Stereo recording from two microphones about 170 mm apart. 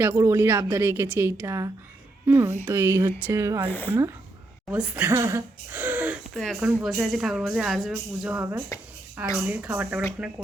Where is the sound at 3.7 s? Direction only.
10° left (ahead or behind).